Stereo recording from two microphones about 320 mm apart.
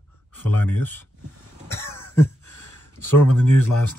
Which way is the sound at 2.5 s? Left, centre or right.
Left.